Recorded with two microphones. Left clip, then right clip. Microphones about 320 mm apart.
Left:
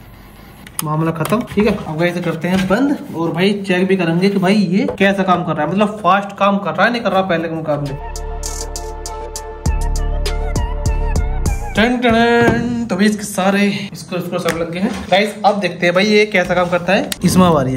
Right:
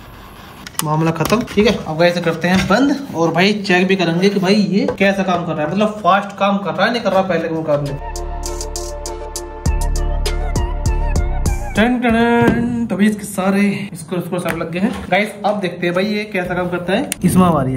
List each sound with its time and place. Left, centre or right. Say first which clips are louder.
0.8 s speech: right 1 dB; centre
11.1 s music: even; centre
14.7 s speech: left 2 dB; centre; by 16.9 s left
16.9 s speech: left 2 dB; centre